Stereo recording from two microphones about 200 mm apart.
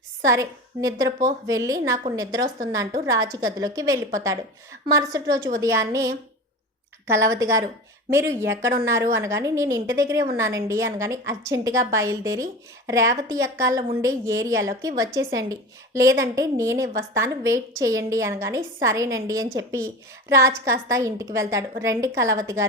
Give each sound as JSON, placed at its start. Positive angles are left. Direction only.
{"t": 0.3, "sound": "a woman's voice", "side_deg": -15}